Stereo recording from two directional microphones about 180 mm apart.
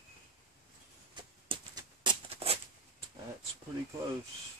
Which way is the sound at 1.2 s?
25° right (ahead or behind).